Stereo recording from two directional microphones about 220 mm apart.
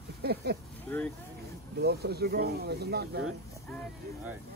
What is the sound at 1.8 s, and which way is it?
Speech, 45° right (ahead or behind).